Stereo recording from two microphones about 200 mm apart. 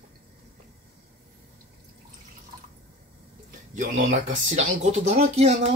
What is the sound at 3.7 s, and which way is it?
Speech, 40° right (ahead or behind).